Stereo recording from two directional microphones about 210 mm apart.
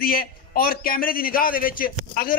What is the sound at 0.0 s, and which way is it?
A man's voice, 45° left (ahead or behind).